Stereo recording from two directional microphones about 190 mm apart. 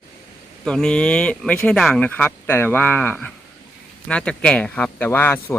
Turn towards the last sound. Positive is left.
turn(degrees=10)  # may be behind; listen again after turning